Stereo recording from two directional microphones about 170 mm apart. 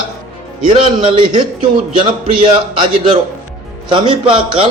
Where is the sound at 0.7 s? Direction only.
30° right (ahead or behind).